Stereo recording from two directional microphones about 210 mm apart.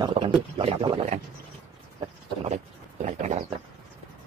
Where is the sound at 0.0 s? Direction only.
25° right (ahead or behind).